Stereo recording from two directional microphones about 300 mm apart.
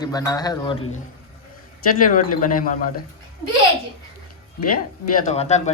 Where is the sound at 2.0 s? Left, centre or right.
Left.